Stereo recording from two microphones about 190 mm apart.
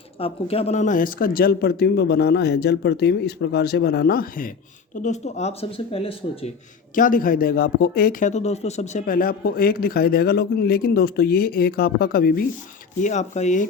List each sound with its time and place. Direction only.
0.2 s speech: 30° left (ahead or behind)
6.9 s a man's voice: 45° left (ahead or behind)
8.3 s a man's voice: 35° left (ahead or behind); by 12.5 s 50° left (ahead or behind)
13.0 s speech: 40° left (ahead or behind)